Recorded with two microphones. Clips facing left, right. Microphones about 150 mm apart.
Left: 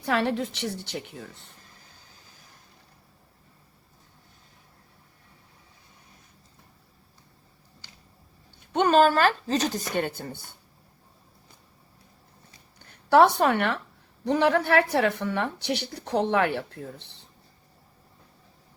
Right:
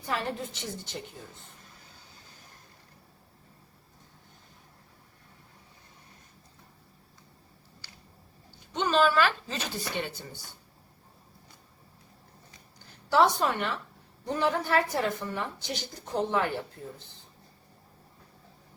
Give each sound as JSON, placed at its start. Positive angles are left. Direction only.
{"t": 0.0, "sound": "a woman's voice", "side_deg": 70}
{"t": 8.4, "sound": "speech", "side_deg": 55}
{"t": 12.8, "sound": "a woman's voice", "side_deg": 60}